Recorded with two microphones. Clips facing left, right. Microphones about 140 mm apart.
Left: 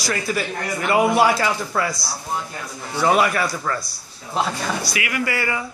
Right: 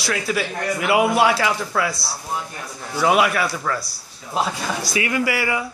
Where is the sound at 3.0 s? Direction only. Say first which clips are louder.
Even; 5° right (ahead or behind).